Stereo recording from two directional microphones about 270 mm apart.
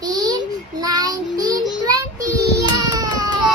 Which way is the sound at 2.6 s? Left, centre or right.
Centre.